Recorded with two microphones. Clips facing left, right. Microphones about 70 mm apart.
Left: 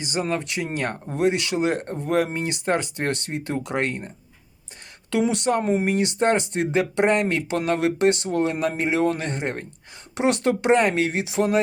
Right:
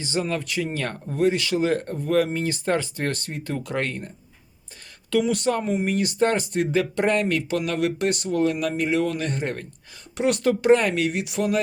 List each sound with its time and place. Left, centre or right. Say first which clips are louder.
0.0 s speech: left 1 dB; left
5.1 s speech: even; left